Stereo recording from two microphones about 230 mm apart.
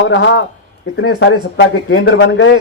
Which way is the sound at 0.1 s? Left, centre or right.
Left.